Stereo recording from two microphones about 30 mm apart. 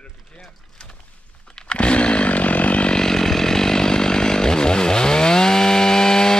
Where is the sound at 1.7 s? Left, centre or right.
Left.